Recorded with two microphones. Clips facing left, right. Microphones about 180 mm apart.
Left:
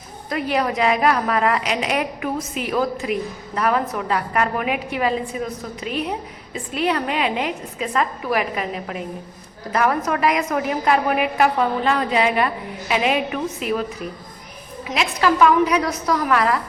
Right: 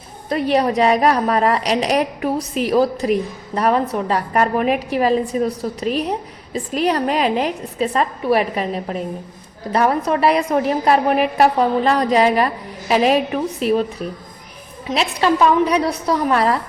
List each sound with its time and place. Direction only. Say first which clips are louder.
0.3 s a woman's voice: right 5 dB; 35° right (ahead or behind)
14.8 s a woman's voice: right 2 dB; 30° right (ahead or behind)